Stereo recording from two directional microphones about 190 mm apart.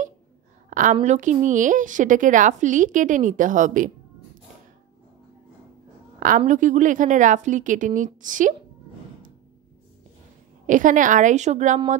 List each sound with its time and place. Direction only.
0.7 s a sound: 45° right (ahead or behind)
1.0 s a woman's voice: 40° right (ahead or behind)
6.1 s a woman's voice: 45° right (ahead or behind)
10.7 s a woman's voice: 45° right (ahead or behind)